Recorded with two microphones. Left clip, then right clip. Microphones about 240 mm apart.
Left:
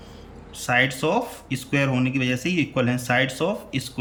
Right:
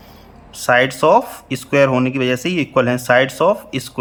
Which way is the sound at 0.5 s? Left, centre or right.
Centre.